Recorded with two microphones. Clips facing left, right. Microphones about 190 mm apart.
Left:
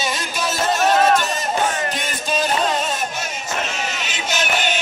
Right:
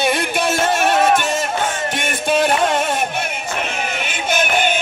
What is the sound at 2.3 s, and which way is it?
Music, 60° right (ahead or behind).